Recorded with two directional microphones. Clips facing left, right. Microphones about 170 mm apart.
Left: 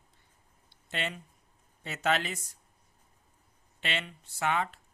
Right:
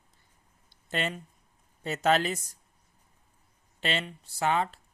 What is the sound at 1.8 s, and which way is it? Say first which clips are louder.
Speech: right 5 dB; 40° right (ahead or behind).